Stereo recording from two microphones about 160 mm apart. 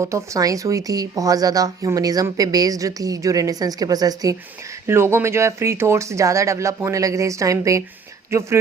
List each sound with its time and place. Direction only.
0.0 s speech: 20° right (ahead or behind)